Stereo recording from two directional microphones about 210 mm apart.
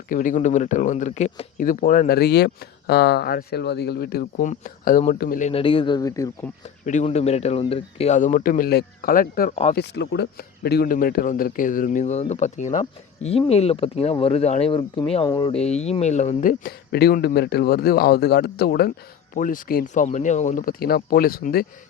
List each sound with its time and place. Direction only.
0.1 s speech: 40° left (ahead or behind)
5.5 s speech: 25° left (ahead or behind)
6.8 s speech: 35° left (ahead or behind)
9.7 s speech: 55° left (ahead or behind); by 15.5 s 20° left (ahead or behind)
15.6 s speech: 30° left (ahead or behind)